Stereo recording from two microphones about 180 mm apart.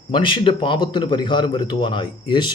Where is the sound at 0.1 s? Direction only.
30° left (ahead or behind).